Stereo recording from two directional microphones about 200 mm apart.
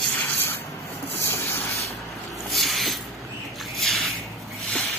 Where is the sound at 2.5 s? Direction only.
Centre (ahead or behind).